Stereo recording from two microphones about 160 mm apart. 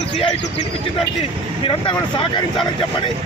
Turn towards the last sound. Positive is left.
turn(degrees=30)  # may be behind; listen again after turning